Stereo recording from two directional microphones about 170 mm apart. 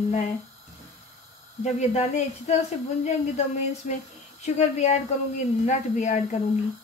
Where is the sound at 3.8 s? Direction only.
45° left (ahead or behind).